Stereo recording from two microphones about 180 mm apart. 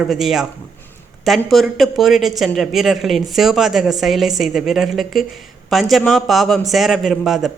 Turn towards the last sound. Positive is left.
turn(degrees=0)  # may be behind; listen again after turning